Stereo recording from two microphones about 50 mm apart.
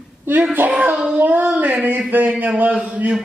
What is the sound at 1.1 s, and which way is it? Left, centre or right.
Speech, right.